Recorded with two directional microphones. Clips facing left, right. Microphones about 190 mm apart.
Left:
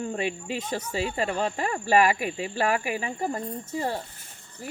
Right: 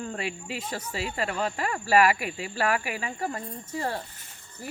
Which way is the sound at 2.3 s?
25° left (ahead or behind).